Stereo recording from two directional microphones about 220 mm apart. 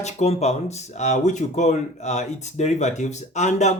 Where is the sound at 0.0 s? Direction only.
30° left (ahead or behind).